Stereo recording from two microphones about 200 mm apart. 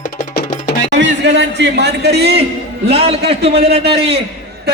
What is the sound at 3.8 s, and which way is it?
Speech, 55° right (ahead or behind).